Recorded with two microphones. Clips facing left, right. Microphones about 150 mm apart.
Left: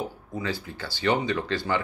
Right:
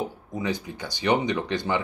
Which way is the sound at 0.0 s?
20° right (ahead or behind).